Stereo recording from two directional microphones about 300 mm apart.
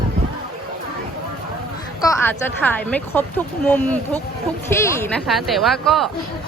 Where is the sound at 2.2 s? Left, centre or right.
Centre.